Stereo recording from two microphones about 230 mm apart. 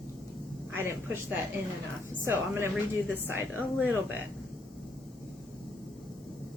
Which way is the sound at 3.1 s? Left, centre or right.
Centre.